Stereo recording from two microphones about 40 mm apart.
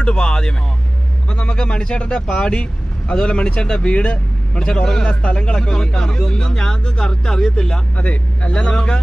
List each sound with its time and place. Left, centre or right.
0.0 s speech: left
8.0 s speech: left